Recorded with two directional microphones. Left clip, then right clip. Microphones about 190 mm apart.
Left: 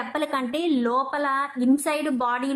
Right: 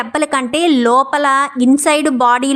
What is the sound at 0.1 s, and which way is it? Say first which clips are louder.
A woman's voice: right 10 dB; 30° right (ahead or behind).